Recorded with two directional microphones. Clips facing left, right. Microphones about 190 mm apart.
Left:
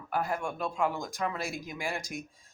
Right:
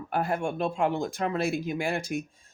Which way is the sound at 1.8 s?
60° right (ahead or behind).